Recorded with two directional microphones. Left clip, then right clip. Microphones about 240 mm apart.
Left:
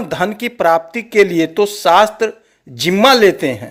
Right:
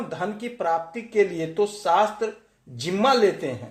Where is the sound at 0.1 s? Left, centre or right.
Left.